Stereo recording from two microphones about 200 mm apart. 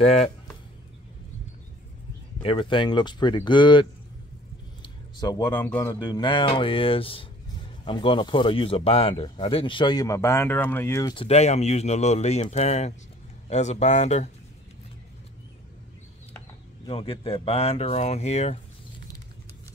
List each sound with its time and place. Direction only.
0.0 s speech: 30° left (ahead or behind)
2.4 s speech: 25° left (ahead or behind)
4.8 s a sound: 20° left (ahead or behind)
5.5 s speech: 10° left (ahead or behind)
6.0 s speech: 20° left (ahead or behind)
11.2 s speech: 35° left (ahead or behind)
16.8 s speech: 25° left (ahead or behind)